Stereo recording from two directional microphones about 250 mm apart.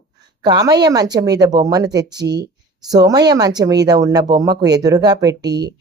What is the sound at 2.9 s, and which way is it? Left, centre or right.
Speech, centre.